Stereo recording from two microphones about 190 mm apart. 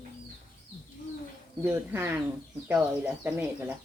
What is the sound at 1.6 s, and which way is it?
Speech, 10° right (ahead or behind).